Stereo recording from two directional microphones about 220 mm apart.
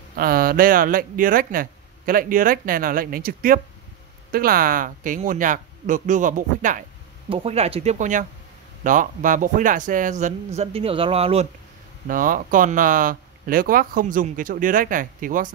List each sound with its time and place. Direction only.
0.1 s speech: 40° right (ahead or behind)
12.1 s speech: 40° right (ahead or behind)